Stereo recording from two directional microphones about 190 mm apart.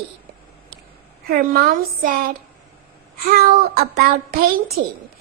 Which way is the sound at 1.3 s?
50° right (ahead or behind).